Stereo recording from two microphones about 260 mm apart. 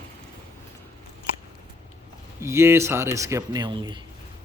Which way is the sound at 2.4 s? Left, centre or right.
Centre.